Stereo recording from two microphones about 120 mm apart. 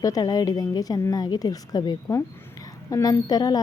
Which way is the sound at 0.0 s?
30° left (ahead or behind).